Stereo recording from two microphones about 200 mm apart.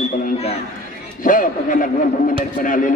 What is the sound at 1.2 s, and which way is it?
A man's voice, 45° left (ahead or behind).